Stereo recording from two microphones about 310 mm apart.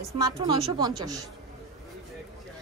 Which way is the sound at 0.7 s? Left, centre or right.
Centre.